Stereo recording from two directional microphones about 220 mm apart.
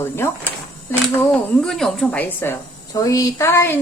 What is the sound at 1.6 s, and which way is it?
A woman's voice, centre (ahead or behind).